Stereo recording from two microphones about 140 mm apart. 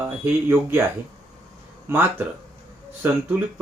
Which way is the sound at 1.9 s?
15° right (ahead or behind).